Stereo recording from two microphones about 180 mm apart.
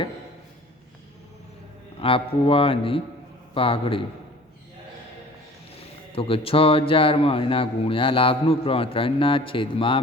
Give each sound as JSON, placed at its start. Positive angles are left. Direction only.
{"t": 2.0, "sound": "a man's voice", "side_deg": 30}
{"t": 6.1, "sound": "a man's voice", "side_deg": 30}